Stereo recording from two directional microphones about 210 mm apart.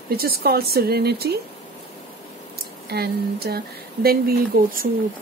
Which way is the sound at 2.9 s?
50° right (ahead or behind).